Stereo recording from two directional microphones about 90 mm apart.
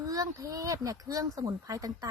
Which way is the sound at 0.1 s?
40° right (ahead or behind).